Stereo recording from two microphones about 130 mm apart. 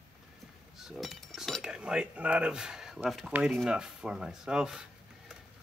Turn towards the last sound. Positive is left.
turn(degrees=-5)  # may be behind; listen again after turning